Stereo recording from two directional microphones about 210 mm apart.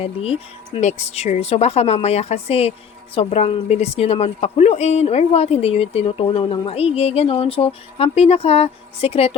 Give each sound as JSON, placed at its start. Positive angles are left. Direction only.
{"t": 0.0, "sound": "a woman's voice", "side_deg": 25}